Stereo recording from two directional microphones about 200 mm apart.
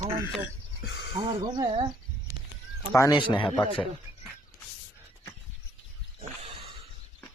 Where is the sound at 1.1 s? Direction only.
20° right (ahead or behind).